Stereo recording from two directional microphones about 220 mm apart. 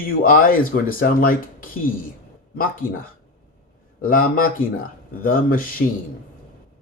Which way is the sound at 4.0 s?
40° left (ahead or behind).